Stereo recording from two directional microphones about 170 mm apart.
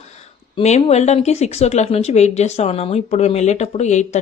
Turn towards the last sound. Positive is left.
turn(degrees=45)  # may be behind; listen again after turning